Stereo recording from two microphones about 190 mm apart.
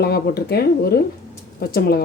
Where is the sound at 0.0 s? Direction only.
55° left (ahead or behind).